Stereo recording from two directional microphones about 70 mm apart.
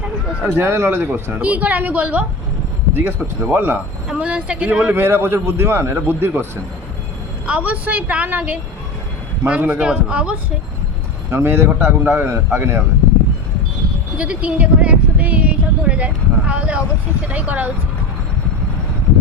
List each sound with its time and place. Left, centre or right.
0.6 s a man's voice: right
1.4 s a woman's voice: right
2.9 s a man's voice: right
4.1 s speech: centre
4.9 s a man's voice: right
7.4 s a woman's voice: right
11.3 s a man's voice: right
14.2 s a woman's voice: centre